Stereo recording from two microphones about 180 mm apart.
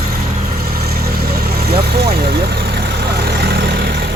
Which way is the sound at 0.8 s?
60° right (ahead or behind).